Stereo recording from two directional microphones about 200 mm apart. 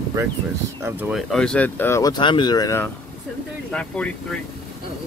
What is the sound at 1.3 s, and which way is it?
Speech, 5° left (ahead or behind).